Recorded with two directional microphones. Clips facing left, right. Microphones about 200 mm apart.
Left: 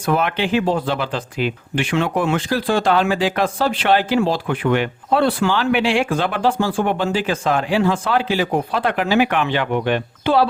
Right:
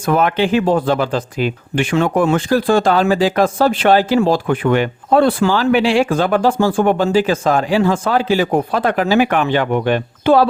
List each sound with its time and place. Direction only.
0.0 s speech: 45° right (ahead or behind)